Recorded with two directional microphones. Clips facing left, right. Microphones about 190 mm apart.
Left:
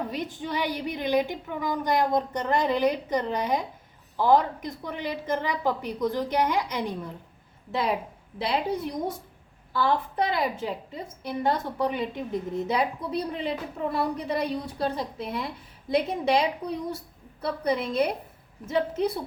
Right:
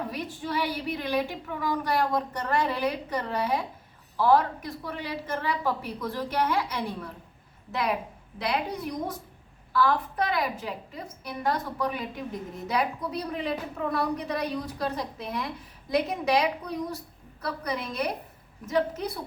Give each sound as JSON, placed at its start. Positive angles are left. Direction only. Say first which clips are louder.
{"t": 0.1, "sound": "a woman's voice", "louder": "left 1 dB", "side_deg": 20}
{"t": 7.7, "sound": "a woman's voice", "louder": "left 2 dB", "side_deg": 30}